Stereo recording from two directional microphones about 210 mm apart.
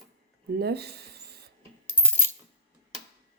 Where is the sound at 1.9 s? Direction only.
10° left (ahead or behind).